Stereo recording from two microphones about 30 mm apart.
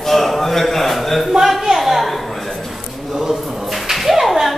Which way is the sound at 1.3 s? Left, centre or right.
Centre.